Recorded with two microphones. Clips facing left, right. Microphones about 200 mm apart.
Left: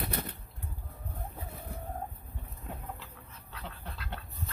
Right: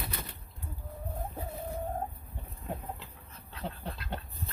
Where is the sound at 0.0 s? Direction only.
55° left (ahead or behind).